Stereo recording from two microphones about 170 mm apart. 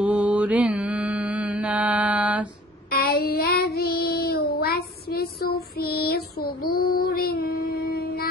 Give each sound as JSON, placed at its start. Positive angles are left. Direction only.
{"t": 0.0, "sound": "mantra", "side_deg": -10}
{"t": 2.9, "sound": "child singing", "side_deg": 65}